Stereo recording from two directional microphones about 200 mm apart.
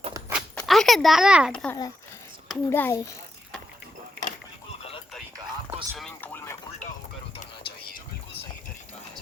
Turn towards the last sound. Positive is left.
turn(degrees=30)  # may be behind; listen again after turning